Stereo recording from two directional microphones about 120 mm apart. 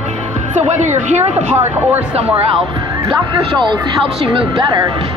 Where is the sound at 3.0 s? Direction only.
35° right (ahead or behind).